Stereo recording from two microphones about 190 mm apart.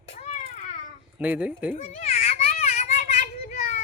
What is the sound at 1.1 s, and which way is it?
Speech, 10° right (ahead or behind).